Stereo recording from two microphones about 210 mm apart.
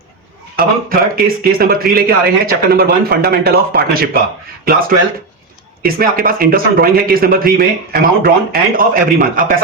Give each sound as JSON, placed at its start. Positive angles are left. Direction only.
{"t": 0.5, "sound": "a man's voice", "side_deg": -45}
{"t": 5.8, "sound": "a man's voice", "side_deg": -45}